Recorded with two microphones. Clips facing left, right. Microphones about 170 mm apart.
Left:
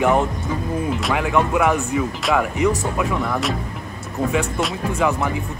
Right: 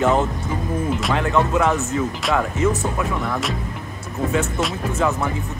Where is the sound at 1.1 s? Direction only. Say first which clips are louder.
Even; 15° left (ahead or behind).